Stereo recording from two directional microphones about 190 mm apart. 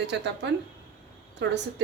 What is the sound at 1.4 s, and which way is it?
Speech, 70° right (ahead or behind).